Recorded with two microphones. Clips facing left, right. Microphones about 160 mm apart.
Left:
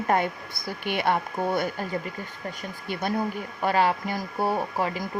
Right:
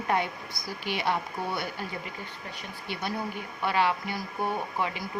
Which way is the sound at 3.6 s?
40° left (ahead or behind).